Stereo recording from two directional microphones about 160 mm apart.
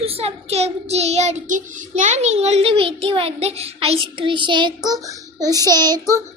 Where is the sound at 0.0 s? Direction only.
40° right (ahead or behind).